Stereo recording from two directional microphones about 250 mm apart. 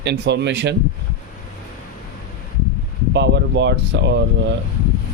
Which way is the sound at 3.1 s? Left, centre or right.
Right.